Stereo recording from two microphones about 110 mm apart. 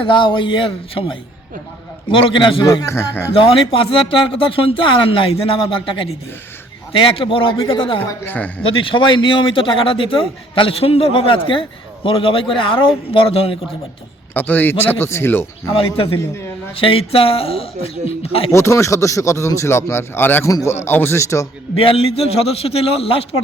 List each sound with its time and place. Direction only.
0.1 s a man's voice: 45° left (ahead or behind)
2.8 s speech: 20° left (ahead or behind)
3.3 s a man's voice: 55° left (ahead or behind)
8.2 s a man's voice: 15° left (ahead or behind)
8.6 s a man's voice: 55° left (ahead or behind)
14.3 s speech: 15° left (ahead or behind)
15.8 s speech: 55° left (ahead or behind)
16.1 s speech: 25° left (ahead or behind)
16.7 s speech: 55° left (ahead or behind)
18.5 s speech: 25° left (ahead or behind)
21.8 s speech: 60° left (ahead or behind)